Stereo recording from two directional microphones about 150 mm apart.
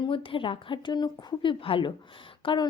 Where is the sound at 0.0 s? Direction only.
35° left (ahead or behind).